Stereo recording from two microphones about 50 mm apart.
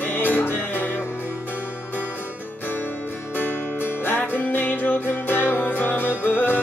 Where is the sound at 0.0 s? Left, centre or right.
Left.